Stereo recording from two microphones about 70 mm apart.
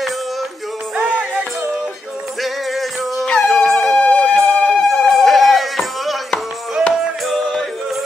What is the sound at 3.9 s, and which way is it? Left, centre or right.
Siren, centre.